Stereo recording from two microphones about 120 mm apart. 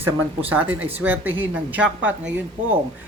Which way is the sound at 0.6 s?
15° right (ahead or behind).